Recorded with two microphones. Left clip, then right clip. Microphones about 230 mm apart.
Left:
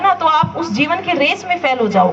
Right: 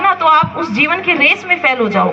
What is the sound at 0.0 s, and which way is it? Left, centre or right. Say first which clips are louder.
A woman's voice: right 2 dB; left.